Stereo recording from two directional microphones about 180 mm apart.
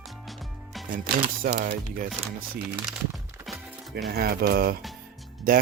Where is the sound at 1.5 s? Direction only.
70° right (ahead or behind).